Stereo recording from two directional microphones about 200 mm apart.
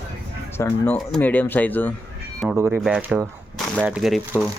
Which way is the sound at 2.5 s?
15° right (ahead or behind).